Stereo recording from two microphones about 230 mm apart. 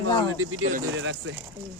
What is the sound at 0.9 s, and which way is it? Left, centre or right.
Speech, right.